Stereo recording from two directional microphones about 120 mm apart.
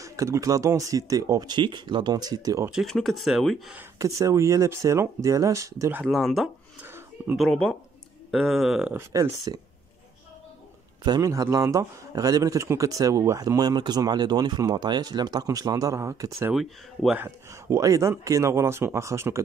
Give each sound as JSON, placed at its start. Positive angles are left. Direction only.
{"t": 0.0, "sound": "speech", "side_deg": -25}
{"t": 2.7, "sound": "speech", "side_deg": 0}
{"t": 4.0, "sound": "speech", "side_deg": -25}
{"t": 5.9, "sound": "speech", "side_deg": -5}
{"t": 6.8, "sound": "a sound", "side_deg": -15}
{"t": 7.3, "sound": "speech", "side_deg": 5}
{"t": 9.1, "sound": "speech", "side_deg": -30}
{"t": 11.1, "sound": "speech", "side_deg": -30}
{"t": 16.5, "sound": "speech", "side_deg": 0}
{"t": 17.2, "sound": "speech", "side_deg": -25}